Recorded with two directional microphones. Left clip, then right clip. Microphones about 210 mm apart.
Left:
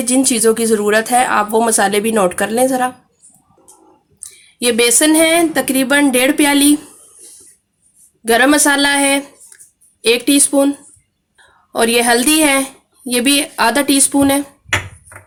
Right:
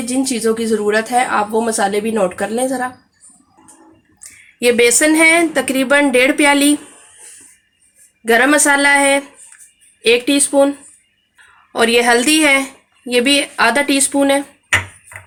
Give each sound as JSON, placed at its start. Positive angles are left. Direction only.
{"t": 0.0, "sound": "speech", "side_deg": 35}
{"t": 4.6, "sound": "speech", "side_deg": 25}
{"t": 8.3, "sound": "a woman's voice", "side_deg": 25}